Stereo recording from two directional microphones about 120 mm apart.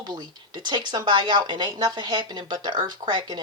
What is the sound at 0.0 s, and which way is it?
Speech, 35° right (ahead or behind).